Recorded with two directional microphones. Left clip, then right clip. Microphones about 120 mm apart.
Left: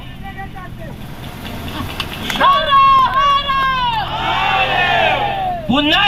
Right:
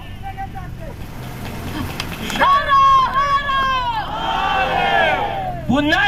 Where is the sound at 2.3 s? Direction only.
35° left (ahead or behind).